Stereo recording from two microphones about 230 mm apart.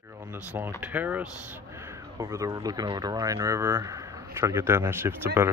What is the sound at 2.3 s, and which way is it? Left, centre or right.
Speech, centre.